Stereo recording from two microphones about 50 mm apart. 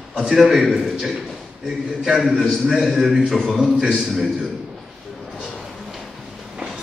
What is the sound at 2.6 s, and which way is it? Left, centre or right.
Speech, centre.